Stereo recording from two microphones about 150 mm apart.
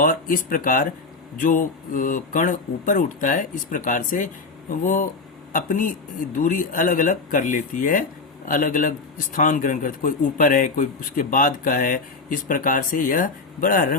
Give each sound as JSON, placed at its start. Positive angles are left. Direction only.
{"t": 0.0, "sound": "a man's voice", "side_deg": 65}